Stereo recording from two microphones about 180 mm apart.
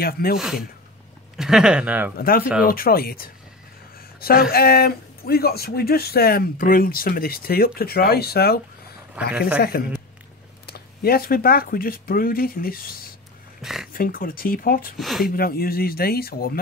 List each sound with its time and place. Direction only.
0.0 s speech: 55° left (ahead or behind)
1.3 s speech: 5° right (ahead or behind)
2.1 s speech: 55° left (ahead or behind)
9.2 s speech: 5° right (ahead or behind)
9.6 s speech: 60° left (ahead or behind)
13.6 s speech: centre (ahead or behind)
13.9 s speech: 55° left (ahead or behind)
15.0 s speech: centre (ahead or behind)
15.2 s speech: 55° left (ahead or behind)